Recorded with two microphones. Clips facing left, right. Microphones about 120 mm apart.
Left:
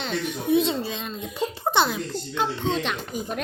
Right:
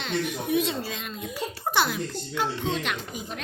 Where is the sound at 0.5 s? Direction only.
25° left (ahead or behind).